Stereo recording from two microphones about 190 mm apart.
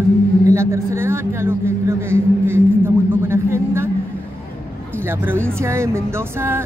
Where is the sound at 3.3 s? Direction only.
15° right (ahead or behind).